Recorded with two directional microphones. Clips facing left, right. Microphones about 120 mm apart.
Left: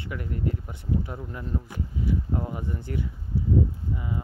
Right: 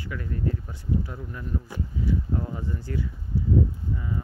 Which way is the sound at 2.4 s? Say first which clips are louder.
Even; 20° left (ahead or behind).